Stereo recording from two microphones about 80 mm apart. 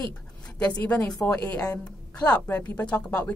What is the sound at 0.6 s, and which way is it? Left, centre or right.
A woman's voice, centre.